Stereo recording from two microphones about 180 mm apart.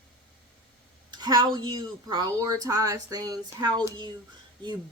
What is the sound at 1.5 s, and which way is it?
Speech, 25° right (ahead or behind).